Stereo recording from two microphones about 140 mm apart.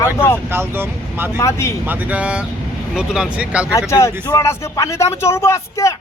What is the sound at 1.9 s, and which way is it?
Speech, 10° right (ahead or behind).